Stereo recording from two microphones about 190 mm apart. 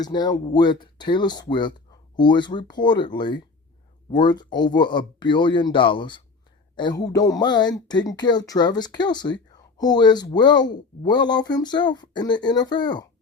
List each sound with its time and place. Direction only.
0.0 s speech: 20° left (ahead or behind)